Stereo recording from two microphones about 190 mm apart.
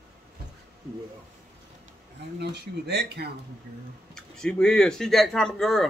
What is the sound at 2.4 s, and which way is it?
Speech, 60° right (ahead or behind).